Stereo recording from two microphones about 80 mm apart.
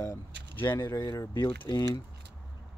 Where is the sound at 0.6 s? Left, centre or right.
Left.